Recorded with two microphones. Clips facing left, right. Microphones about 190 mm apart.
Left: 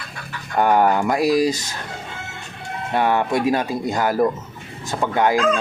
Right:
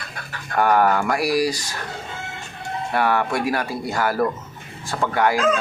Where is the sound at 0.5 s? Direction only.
20° left (ahead or behind).